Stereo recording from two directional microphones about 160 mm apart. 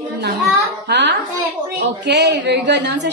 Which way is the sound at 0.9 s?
90° right.